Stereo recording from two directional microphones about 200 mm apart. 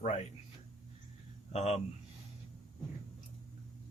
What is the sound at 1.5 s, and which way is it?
Speech, 30° left (ahead or behind).